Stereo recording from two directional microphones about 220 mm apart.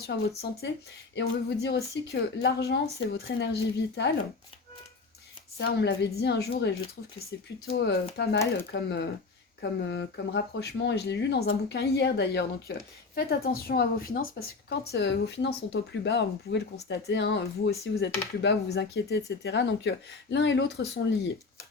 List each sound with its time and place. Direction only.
0.6 s a woman's voice: 55° left (ahead or behind)
5.5 s a woman's voice: 50° left (ahead or behind)